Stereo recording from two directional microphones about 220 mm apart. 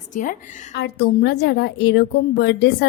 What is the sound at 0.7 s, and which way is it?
A woman's voice, 50° left (ahead or behind).